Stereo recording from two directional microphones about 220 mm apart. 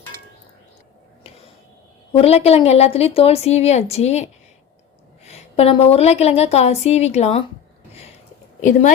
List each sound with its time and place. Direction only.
2.1 s a woman's voice: 30° left (ahead or behind)